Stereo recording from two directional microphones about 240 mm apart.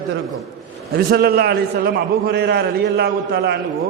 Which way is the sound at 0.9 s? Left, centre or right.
Right.